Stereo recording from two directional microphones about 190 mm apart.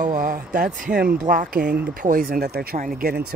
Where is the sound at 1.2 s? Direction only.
40° right (ahead or behind).